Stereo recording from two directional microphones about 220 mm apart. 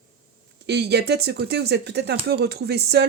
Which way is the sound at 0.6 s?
50° right (ahead or behind).